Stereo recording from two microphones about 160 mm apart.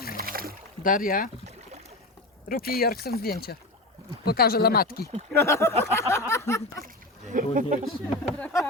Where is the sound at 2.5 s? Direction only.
70° left (ahead or behind).